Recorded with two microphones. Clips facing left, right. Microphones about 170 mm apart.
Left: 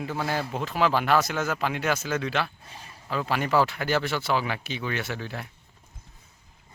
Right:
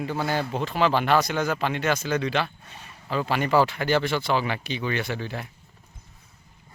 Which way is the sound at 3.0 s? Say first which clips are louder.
Right 2 dB; centre (ahead or behind).